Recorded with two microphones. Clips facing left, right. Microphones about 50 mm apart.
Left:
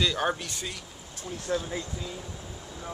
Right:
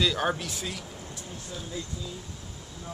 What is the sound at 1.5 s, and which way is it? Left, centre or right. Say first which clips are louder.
Speech: left 12 dB; left.